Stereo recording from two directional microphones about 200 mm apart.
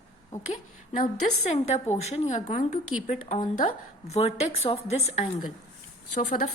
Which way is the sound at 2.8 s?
90° left.